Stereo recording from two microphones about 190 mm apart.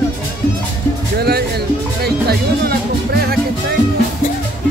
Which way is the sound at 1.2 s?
55° right (ahead or behind).